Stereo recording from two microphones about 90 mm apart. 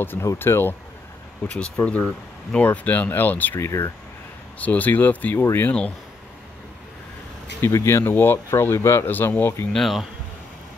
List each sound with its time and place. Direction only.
0.0 s speech: 25° left (ahead or behind)
1.8 s speech: 20° left (ahead or behind)
4.6 s speech: 15° left (ahead or behind)
7.6 s speech: 30° left (ahead or behind)
9.7 s speech: centre (ahead or behind)